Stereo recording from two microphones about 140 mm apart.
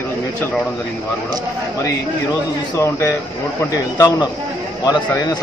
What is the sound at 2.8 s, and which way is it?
A man's voice, 20° left (ahead or behind).